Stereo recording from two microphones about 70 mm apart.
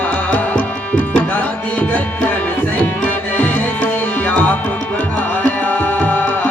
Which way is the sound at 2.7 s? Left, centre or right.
Left.